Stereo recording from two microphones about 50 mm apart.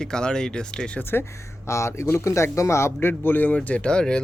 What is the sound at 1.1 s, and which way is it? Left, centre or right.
Speech, left.